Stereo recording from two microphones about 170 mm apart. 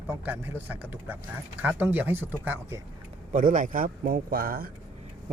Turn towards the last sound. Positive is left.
turn(degrees=-60)  # may be behind; listen again after turning